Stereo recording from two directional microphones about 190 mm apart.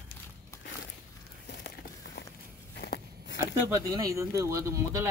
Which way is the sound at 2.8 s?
60° left (ahead or behind).